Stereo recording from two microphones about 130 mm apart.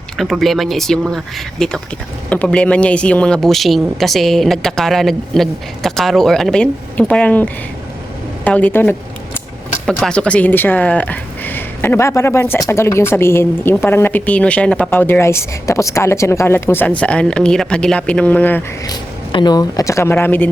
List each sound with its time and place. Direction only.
0.2 s speech: centre (ahead or behind); by 9.4 s 15° left (ahead or behind)
9.8 s a woman's voice: 5° left (ahead or behind)
18.9 s speech: 35° left (ahead or behind); by 20.5 s 15° left (ahead or behind)